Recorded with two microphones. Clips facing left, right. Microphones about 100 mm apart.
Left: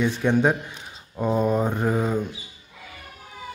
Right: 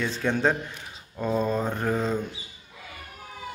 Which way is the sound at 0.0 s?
15° left (ahead or behind).